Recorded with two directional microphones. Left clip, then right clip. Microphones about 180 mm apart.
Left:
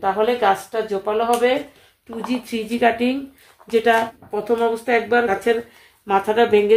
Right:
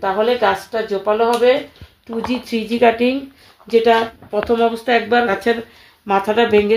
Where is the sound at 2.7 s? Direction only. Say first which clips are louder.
Right 4 dB; 45° right (ahead or behind).